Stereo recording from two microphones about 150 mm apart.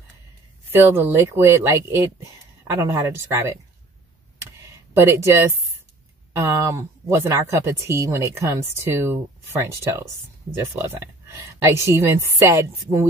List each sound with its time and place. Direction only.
0.7 s speech: 15° right (ahead or behind)
4.9 s speech: 15° right (ahead or behind)